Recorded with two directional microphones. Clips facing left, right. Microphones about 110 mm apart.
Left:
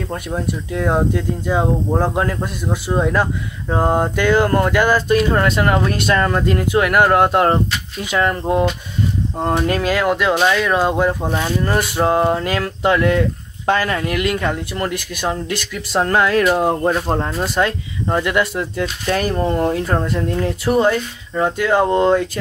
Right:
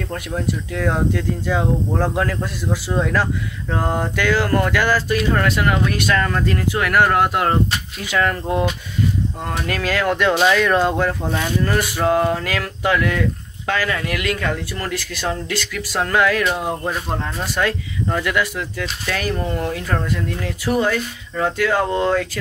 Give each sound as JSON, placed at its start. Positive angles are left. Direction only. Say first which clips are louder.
{"t": 0.1, "sound": "speech", "louder": "even", "side_deg": 25}
{"t": 10.1, "sound": "speech", "louder": "even", "side_deg": 5}